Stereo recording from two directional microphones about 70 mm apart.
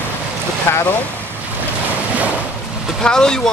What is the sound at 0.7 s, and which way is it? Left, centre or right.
Speech, left.